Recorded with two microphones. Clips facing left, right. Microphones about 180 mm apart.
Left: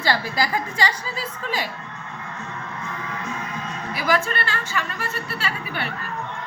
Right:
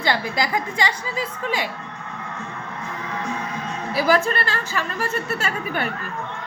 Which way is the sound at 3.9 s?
35° right (ahead or behind).